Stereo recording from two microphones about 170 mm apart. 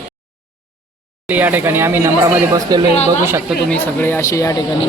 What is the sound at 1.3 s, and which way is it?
Speech, 10° right (ahead or behind).